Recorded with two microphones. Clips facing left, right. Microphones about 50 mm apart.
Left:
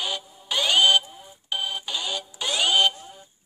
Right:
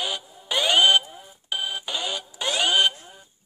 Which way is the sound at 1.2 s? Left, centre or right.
Centre.